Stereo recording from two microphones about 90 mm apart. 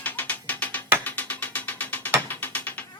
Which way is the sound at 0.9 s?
20° left (ahead or behind).